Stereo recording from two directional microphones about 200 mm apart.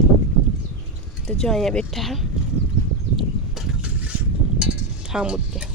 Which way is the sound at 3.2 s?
Centre (ahead or behind).